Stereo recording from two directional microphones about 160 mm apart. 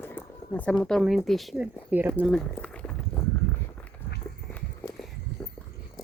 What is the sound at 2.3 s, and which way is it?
Walk, 5° left (ahead or behind).